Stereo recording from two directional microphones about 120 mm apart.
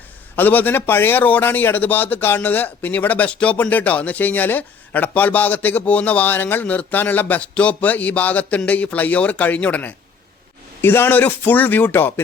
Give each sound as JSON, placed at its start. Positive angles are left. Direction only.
{"t": 0.3, "sound": "a man's voice", "side_deg": 15}